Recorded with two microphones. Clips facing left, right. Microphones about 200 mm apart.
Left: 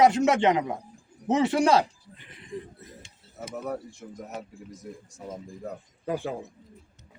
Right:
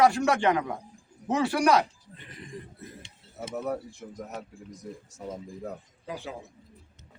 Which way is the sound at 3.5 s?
Centre (ahead or behind).